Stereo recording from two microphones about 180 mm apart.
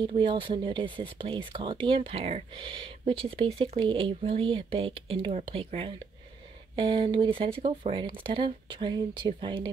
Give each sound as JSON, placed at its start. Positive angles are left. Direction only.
{"t": 0.0, "sound": "speech", "side_deg": -25}